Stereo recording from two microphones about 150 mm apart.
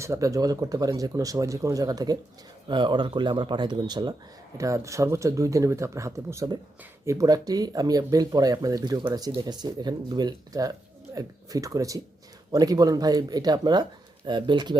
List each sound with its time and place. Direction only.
0.0 s speech: 20° right (ahead or behind)